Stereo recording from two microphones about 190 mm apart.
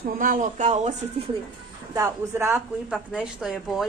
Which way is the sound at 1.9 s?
15° right (ahead or behind).